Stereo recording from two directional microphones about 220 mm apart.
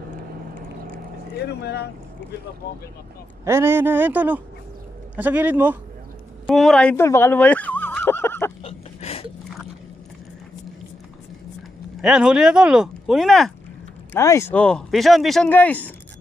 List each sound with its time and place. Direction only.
1.3 s speech: 45° left (ahead or behind)
3.4 s speech: 10° right (ahead or behind)
6.4 s turkey: centre (ahead or behind)
8.6 s a sound: 25° left (ahead or behind)
12.0 s speech: 5° right (ahead or behind)
14.1 s speech: 10° left (ahead or behind)